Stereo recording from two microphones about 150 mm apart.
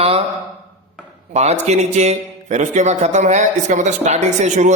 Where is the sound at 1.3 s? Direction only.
50° right (ahead or behind).